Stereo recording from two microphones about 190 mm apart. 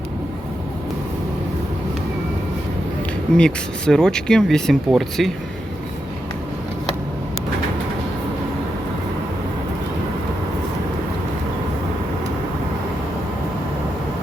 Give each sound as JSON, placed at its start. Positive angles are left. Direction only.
{"t": 3.3, "sound": "speech", "side_deg": 5}